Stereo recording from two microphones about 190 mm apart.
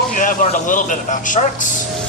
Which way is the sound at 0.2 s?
45° left (ahead or behind).